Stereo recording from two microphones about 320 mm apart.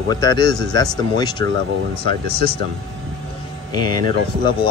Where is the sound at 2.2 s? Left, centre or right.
Right.